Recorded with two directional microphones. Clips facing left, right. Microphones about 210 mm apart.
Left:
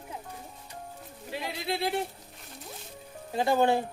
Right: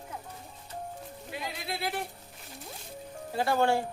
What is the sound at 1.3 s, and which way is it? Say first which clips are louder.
Speech: left 5 dB; 25° left (ahead or behind).